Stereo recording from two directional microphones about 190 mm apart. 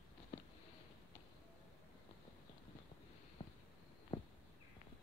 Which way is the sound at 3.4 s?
30° left (ahead or behind).